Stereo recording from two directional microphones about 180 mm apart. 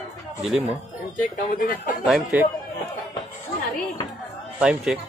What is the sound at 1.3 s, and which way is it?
Speech, 55° left (ahead or behind).